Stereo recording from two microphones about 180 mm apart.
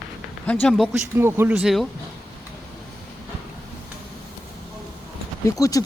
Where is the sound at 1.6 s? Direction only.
Centre (ahead or behind).